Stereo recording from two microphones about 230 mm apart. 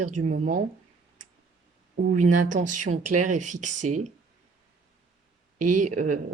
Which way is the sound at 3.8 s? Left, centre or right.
Right.